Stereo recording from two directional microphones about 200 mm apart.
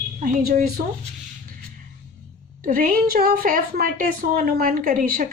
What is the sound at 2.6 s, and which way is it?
Speech, 45° right (ahead or behind).